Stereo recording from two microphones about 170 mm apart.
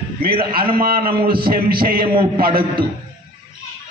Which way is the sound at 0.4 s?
60° right (ahead or behind).